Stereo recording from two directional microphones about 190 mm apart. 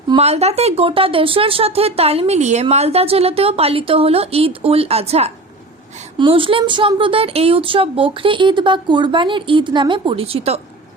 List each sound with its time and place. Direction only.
0.2 s speech: 35° right (ahead or behind)